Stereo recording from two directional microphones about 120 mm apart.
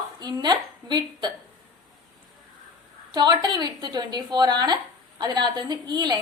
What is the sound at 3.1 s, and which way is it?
A woman's voice, 35° right (ahead or behind).